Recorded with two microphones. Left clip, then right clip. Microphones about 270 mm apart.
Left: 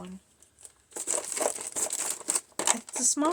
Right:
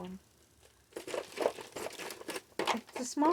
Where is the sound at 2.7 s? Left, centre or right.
Centre.